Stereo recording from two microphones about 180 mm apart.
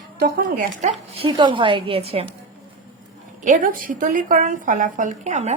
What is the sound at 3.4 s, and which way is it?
A woman's voice, 45° right (ahead or behind).